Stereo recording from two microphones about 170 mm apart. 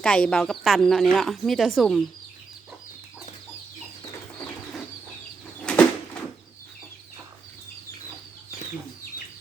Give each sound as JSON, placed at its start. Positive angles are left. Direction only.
{"t": 0.0, "sound": "speech", "side_deg": 5}
{"t": 5.5, "sound": "bird flight", "side_deg": 5}